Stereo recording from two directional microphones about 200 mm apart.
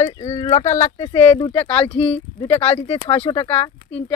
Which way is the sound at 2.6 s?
30° left (ahead or behind).